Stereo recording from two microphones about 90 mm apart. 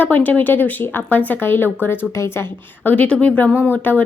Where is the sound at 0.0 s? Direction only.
20° left (ahead or behind).